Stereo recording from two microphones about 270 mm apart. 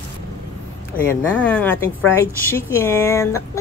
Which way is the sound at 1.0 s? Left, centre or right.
Centre.